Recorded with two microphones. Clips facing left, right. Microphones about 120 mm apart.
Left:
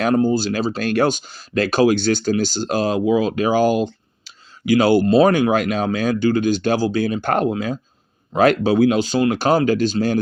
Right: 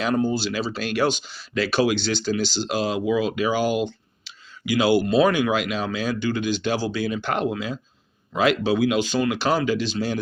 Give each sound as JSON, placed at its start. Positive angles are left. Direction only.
{"t": 0.0, "sound": "speech", "side_deg": 50}